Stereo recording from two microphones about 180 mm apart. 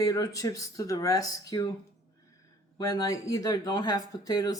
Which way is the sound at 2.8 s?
20° left (ahead or behind).